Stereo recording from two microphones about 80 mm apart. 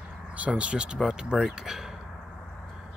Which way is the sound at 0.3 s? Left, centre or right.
Centre.